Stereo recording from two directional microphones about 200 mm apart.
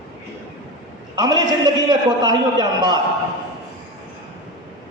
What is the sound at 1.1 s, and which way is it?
A man's voice, 20° right (ahead or behind).